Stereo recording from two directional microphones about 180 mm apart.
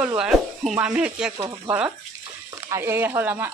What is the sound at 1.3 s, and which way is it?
Speech, 25° right (ahead or behind).